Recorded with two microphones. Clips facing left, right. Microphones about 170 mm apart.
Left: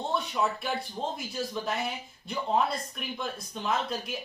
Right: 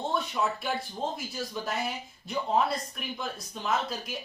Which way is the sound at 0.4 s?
Centre (ahead or behind).